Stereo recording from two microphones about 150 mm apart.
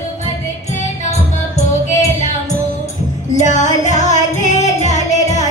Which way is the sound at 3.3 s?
50° left (ahead or behind).